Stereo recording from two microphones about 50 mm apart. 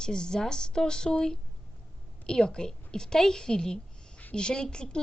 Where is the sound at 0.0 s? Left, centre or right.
Centre.